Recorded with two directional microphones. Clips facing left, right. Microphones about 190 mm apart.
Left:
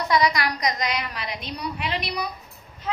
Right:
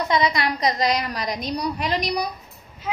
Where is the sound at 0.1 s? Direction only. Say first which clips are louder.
Left 1 dB; 25° right (ahead or behind); by 2.2 s 40° right (ahead or behind).